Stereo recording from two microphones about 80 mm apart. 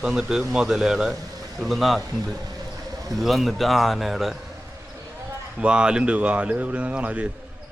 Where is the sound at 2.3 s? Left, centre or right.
Right.